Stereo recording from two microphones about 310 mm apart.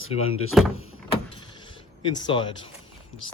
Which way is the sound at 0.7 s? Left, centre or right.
Left.